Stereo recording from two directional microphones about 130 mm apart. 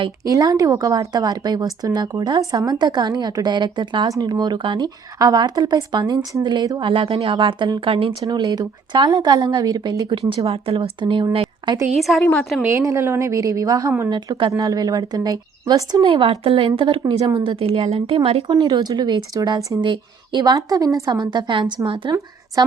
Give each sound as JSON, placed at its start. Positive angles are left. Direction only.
{"t": 0.3, "sound": "a woman's voice", "side_deg": -30}
{"t": 8.3, "sound": "a woman's voice", "side_deg": -30}
{"t": 11.9, "sound": "a woman's voice", "side_deg": 0}
{"t": 12.6, "sound": "a woman's voice", "side_deg": -20}
{"t": 16.0, "sound": "speech", "side_deg": -45}
{"t": 18.4, "sound": "a woman's voice", "side_deg": -35}
{"t": 19.8, "sound": "a woman's voice", "side_deg": -35}